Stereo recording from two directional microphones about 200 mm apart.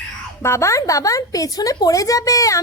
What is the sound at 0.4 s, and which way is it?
A woman's voice, 15° left (ahead or behind).